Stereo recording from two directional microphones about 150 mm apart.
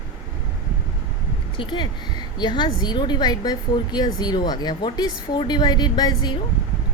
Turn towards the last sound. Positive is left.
turn(degrees=30)  # may be behind; listen again after turning